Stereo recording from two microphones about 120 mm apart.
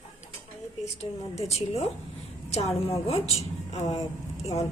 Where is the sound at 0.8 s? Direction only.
65° left (ahead or behind).